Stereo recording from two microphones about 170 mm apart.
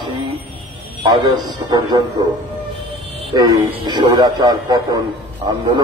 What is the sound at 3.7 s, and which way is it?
A man's voice, 25° right (ahead or behind).